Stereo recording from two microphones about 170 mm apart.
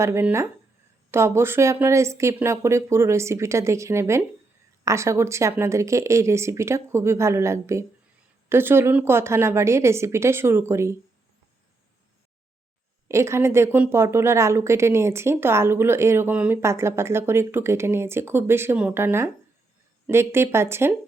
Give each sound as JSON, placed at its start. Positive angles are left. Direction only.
{"t": 0.0, "sound": "speech", "side_deg": -15}
{"t": 13.1, "sound": "speech", "side_deg": -15}